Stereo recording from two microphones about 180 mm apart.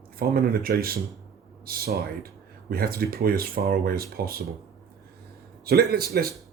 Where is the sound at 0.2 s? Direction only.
55° right (ahead or behind).